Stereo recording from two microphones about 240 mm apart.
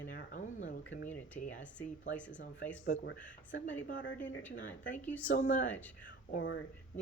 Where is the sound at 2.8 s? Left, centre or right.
Left.